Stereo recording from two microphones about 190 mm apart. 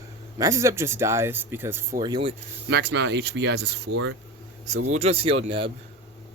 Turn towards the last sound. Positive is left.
turn(degrees=-30)  # may be behind; listen again after turning